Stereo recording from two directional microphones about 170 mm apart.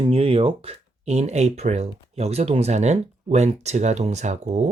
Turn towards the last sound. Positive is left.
turn(degrees=-45)  # may be behind; listen again after turning